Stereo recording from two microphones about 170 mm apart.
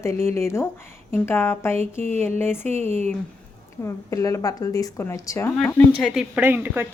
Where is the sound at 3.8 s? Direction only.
20° left (ahead or behind).